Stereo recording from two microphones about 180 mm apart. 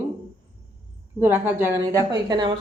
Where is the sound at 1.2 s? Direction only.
10° right (ahead or behind).